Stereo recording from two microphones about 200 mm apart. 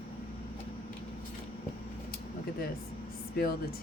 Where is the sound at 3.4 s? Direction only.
50° left (ahead or behind).